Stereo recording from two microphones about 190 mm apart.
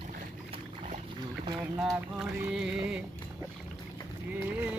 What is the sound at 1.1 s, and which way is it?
Boat, 20° right (ahead or behind).